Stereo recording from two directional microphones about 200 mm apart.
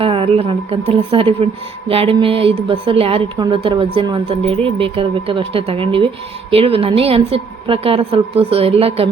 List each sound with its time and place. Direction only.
0.0 s a woman's voice: 25° right (ahead or behind)